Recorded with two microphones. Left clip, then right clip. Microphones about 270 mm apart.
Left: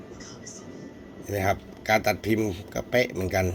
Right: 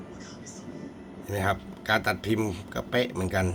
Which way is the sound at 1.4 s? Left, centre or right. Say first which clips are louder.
Left 2 dB; centre.